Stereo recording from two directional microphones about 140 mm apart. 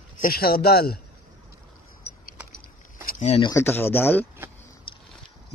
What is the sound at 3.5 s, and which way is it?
Speech, 15° left (ahead or behind).